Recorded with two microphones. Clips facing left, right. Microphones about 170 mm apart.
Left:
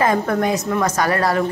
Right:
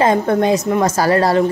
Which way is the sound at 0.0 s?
25° right (ahead or behind).